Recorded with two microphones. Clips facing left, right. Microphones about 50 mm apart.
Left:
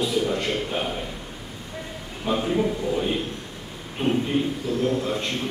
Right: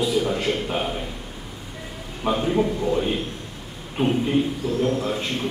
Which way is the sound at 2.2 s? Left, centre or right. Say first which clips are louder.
Right 2 dB; centre.